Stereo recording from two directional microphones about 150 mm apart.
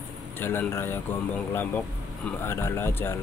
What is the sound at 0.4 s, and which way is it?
Speech, 15° left (ahead or behind).